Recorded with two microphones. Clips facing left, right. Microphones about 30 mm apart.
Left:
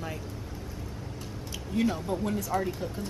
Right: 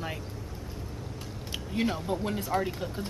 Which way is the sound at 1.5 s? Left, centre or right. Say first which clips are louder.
Left 2 dB; right.